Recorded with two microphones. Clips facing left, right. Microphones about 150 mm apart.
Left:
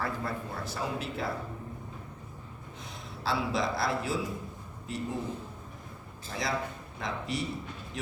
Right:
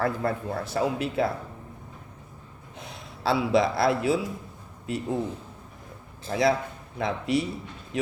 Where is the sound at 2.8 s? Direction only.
65° right (ahead or behind).